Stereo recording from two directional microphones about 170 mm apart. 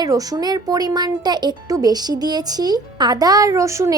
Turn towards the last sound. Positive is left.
turn(degrees=-15)  # may be behind; listen again after turning